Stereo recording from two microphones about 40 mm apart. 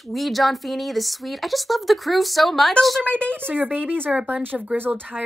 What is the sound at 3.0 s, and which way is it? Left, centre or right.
Speech, left.